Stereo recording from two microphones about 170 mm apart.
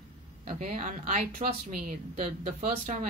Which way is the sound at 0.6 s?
50° right (ahead or behind).